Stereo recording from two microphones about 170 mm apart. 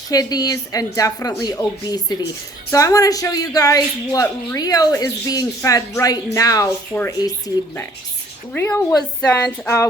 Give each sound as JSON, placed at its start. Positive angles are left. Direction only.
{"t": 0.1, "sound": "speech", "side_deg": 20}